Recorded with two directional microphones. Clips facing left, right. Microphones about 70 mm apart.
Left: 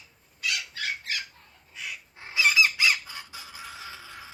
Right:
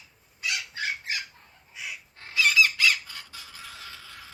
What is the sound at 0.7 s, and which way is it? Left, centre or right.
Bird, right.